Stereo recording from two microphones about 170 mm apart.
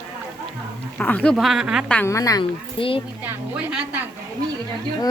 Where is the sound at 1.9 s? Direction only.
15° left (ahead or behind).